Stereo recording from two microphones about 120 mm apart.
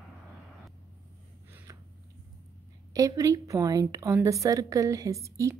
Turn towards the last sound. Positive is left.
turn(degrees=-25)  # may be behind; listen again after turning